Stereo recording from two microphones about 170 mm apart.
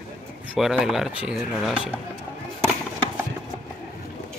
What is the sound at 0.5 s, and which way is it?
Speech, centre (ahead or behind).